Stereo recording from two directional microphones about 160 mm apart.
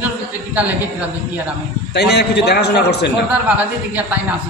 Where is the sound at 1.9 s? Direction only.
90° left.